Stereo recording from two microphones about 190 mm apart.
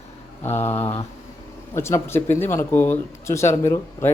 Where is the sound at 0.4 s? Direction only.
10° left (ahead or behind).